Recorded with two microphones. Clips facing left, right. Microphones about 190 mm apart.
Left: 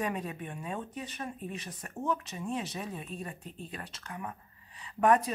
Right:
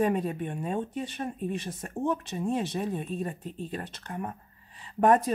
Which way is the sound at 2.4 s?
40° right (ahead or behind).